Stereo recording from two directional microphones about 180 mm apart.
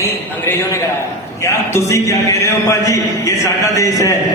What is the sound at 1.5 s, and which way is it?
A man's voice, 15° left (ahead or behind).